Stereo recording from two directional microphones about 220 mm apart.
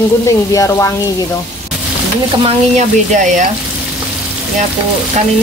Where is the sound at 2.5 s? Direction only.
35° right (ahead or behind).